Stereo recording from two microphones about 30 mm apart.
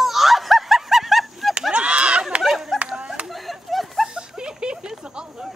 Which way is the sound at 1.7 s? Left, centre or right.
Right.